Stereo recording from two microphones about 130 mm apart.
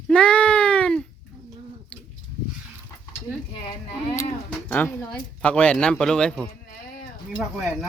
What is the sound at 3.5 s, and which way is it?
Speech, 35° left (ahead or behind).